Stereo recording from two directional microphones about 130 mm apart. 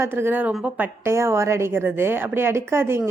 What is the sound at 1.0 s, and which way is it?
A woman's voice, 20° right (ahead or behind).